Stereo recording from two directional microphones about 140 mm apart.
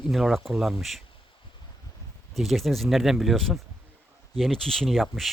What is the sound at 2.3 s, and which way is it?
Speech, centre (ahead or behind).